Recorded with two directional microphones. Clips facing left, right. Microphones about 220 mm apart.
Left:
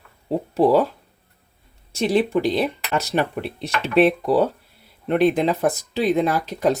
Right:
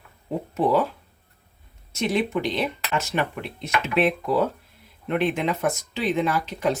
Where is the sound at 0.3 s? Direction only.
35° left (ahead or behind).